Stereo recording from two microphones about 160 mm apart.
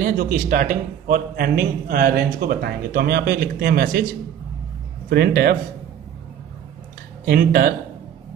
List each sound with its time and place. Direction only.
0.0 s a man's voice: 65° right (ahead or behind)
5.1 s a man's voice: 75° right (ahead or behind)
7.2 s a man's voice: 70° right (ahead or behind)